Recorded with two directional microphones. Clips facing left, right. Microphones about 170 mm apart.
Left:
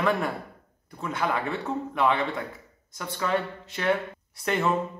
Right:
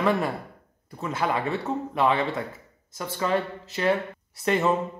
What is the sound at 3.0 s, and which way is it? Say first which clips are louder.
Speech: right 2 dB; 25° right (ahead or behind).